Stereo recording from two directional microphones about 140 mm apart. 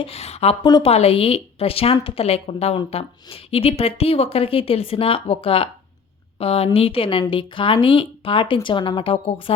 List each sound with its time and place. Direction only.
0.0 s speech: 50° left (ahead or behind)
0.6 s a woman's voice: 30° left (ahead or behind)
0.9 s a woman's voice: 45° left (ahead or behind)